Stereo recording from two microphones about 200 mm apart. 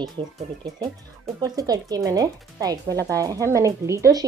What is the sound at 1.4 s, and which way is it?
Speech, 20° right (ahead or behind).